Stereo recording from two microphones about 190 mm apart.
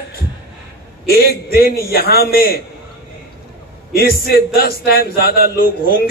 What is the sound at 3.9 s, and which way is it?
A man's voice, 55° left (ahead or behind).